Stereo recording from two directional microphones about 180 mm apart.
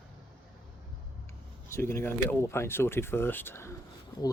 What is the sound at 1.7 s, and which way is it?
Speech, 15° left (ahead or behind).